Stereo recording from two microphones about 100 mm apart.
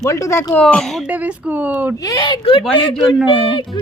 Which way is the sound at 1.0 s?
15° right (ahead or behind).